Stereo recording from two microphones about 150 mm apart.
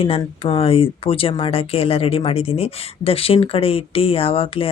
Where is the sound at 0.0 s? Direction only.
40° left (ahead or behind).